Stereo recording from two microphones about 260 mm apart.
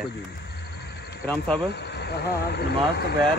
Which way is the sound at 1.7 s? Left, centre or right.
Left.